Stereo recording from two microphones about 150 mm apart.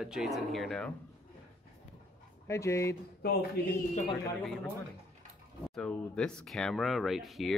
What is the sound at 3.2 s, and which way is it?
Speech, 90° left.